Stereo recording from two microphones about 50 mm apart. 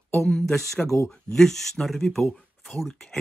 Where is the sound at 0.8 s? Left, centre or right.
Left.